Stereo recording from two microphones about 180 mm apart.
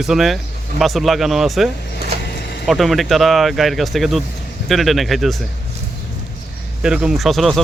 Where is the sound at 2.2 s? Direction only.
65° left (ahead or behind).